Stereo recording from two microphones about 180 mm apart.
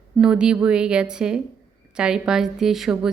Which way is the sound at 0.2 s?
5° right (ahead or behind).